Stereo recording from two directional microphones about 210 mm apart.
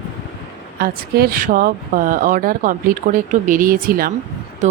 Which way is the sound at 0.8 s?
45° right (ahead or behind).